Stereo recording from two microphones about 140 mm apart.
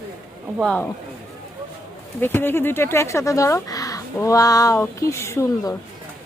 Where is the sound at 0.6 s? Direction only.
10° left (ahead or behind).